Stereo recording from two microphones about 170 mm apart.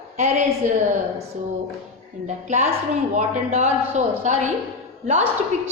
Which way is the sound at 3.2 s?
45° right (ahead or behind).